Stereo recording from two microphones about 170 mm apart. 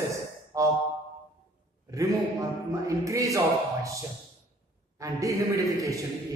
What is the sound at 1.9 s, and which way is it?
A man's voice, 20° right (ahead or behind).